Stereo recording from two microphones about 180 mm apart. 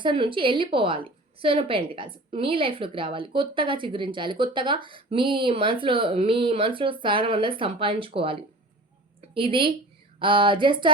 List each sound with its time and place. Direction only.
0.0 s a woman's voice: 30° right (ahead or behind)